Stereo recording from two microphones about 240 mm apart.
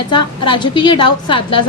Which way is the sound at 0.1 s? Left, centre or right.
Centre.